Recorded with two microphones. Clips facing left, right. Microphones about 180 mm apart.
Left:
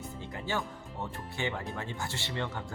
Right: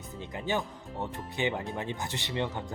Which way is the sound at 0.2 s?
20° right (ahead or behind).